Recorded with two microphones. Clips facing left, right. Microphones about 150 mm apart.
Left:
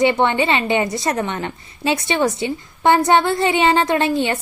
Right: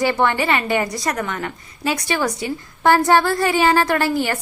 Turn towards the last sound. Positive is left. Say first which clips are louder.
# left 1 dB
turn(degrees=25)  # may be behind; listen again after turning